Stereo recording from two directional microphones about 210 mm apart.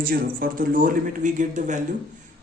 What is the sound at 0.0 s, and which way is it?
A man's voice, 45° right (ahead or behind).